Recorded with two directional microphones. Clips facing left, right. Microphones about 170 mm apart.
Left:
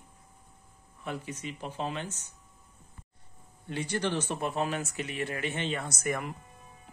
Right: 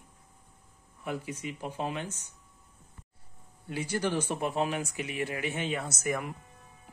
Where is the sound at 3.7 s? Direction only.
10° right (ahead or behind).